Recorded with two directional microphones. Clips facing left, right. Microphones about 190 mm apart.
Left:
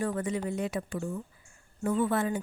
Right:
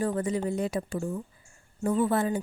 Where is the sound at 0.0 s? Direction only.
35° right (ahead or behind).